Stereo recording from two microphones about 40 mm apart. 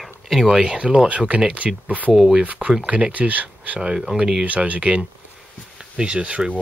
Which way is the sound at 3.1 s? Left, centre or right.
Right.